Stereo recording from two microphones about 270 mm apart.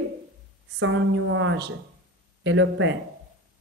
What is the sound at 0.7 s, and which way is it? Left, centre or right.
Speech, right.